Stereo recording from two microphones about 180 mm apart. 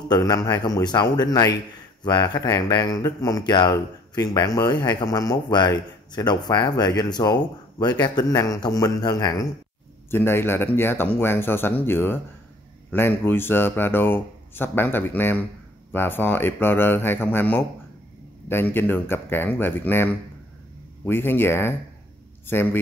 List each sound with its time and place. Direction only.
0.1 s speech: 20° left (ahead or behind)